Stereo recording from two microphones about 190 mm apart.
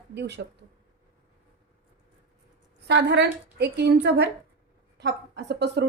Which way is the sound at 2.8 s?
65° right (ahead or behind).